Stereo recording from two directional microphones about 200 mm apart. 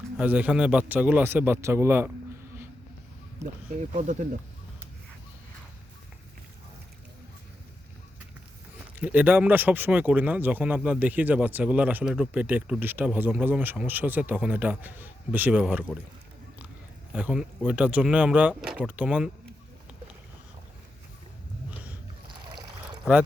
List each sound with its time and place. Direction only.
0.2 s speech: 5° right (ahead or behind)
3.4 s speech: 15° right (ahead or behind)
3.8 s speech: 40° right (ahead or behind)
9.0 s speech: 10° right (ahead or behind)
17.1 s speech: 5° right (ahead or behind)